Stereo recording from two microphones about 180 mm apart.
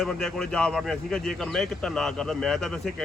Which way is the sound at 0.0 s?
Centre (ahead or behind).